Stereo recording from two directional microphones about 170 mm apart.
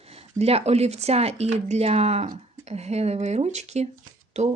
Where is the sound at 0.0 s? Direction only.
35° right (ahead or behind).